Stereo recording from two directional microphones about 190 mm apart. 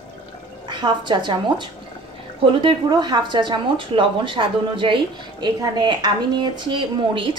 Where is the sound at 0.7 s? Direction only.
25° right (ahead or behind).